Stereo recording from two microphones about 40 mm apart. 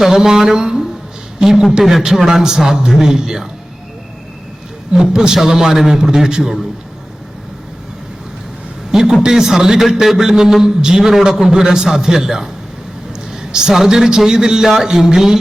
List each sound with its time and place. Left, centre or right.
0.0 s a man's voice: centre
4.9 s a man's voice: centre
8.9 s a man's voice: centre
13.3 s a sound: centre
13.7 s a man's voice: centre